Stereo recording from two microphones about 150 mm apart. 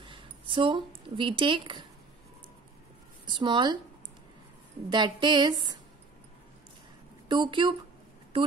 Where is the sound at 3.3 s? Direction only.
30° right (ahead or behind).